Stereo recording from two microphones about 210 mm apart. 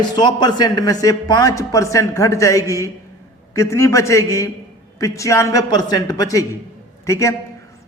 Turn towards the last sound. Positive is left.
turn(degrees=15)  # may be behind; listen again after turning